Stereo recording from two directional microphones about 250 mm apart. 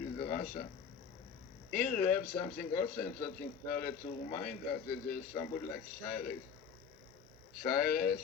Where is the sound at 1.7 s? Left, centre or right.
Left.